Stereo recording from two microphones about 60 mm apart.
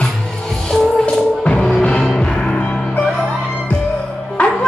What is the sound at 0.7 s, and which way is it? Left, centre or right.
Music, centre.